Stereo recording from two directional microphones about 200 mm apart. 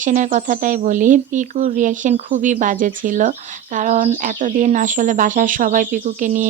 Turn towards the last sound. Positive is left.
turn(degrees=-40)  # may be behind; listen again after turning